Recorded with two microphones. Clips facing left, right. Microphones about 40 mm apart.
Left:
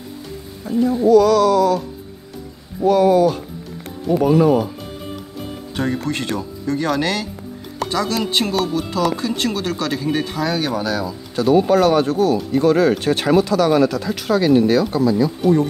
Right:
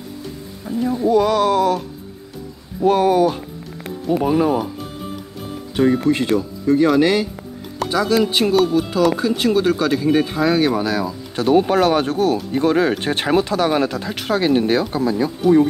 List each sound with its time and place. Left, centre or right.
0.7 s speech: centre
1.0 s speech: right
2.8 s speech: right
4.1 s speech: centre
5.8 s speech: centre
11.3 s speech: right
12.5 s speech: right